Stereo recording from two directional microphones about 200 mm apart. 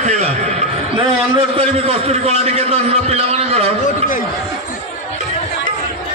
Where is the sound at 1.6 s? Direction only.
30° right (ahead or behind).